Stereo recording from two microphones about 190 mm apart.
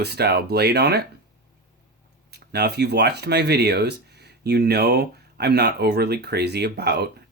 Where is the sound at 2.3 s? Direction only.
60° right (ahead or behind).